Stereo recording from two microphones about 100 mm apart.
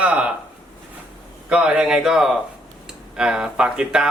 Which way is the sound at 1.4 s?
10° right (ahead or behind).